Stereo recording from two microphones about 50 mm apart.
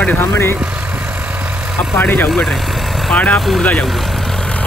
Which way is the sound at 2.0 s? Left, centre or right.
Left.